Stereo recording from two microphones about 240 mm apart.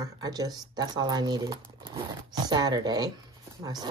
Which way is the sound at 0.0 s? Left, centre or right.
Centre.